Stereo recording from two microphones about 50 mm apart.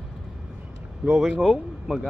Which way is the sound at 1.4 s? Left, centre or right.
Centre.